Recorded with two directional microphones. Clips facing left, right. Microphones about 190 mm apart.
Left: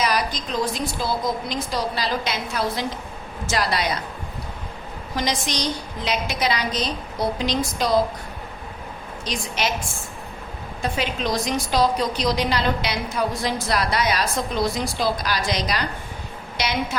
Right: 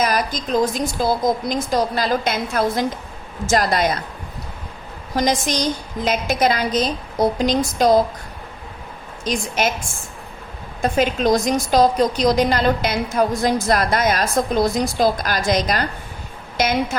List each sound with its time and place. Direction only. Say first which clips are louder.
0.0 s a woman's voice: right 3 dB; 45° right (ahead or behind)
5.1 s a woman's voice: right 6 dB; 45° right (ahead or behind)
9.2 s a woman's voice: right 5 dB; 50° right (ahead or behind)
10.8 s a woman's voice: right 8 dB; 45° right (ahead or behind)